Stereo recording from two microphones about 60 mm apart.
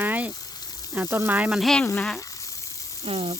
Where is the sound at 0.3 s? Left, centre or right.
Left.